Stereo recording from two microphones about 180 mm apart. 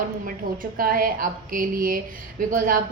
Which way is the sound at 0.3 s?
50° right (ahead or behind).